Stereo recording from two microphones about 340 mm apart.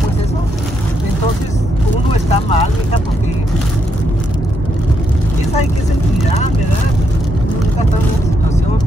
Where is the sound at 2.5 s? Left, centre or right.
Centre.